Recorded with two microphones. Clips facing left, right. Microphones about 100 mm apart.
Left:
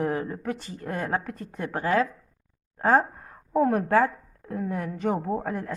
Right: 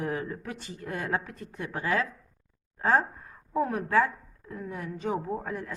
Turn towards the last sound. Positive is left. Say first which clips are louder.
# left 5 dB
turn(degrees=55)  # may be behind; listen again after turning